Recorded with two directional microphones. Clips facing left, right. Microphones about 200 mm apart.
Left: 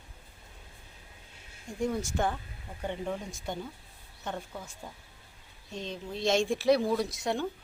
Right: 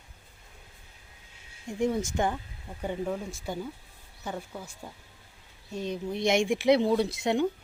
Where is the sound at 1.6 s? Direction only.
20° right (ahead or behind).